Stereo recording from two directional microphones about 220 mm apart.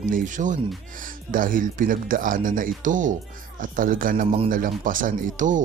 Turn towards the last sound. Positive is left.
turn(degrees=-35)  # may be behind; listen again after turning